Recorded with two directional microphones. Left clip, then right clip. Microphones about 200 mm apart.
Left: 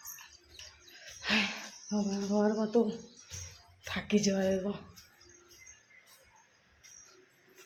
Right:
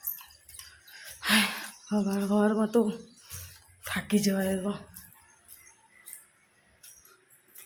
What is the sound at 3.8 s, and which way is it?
A woman's voice, 10° right (ahead or behind).